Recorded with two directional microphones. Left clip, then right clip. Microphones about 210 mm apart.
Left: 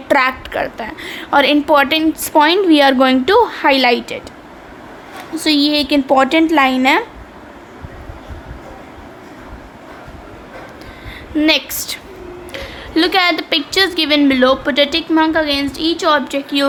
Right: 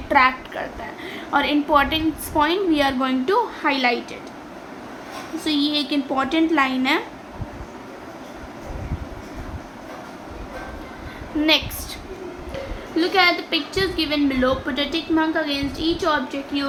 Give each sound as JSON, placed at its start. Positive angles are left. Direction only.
{"t": 0.1, "sound": "a woman's voice", "side_deg": 60}
{"t": 5.4, "sound": "a woman's voice", "side_deg": 45}
{"t": 11.3, "sound": "a woman's voice", "side_deg": 60}
{"t": 13.0, "sound": "a woman's voice", "side_deg": 60}